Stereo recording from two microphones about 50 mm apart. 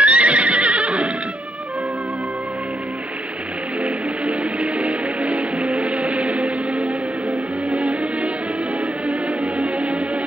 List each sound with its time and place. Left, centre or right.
0.0 s neigh: right
3.8 s music: right